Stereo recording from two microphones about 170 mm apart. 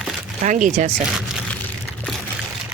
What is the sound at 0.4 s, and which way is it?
Speech, 45° right (ahead or behind).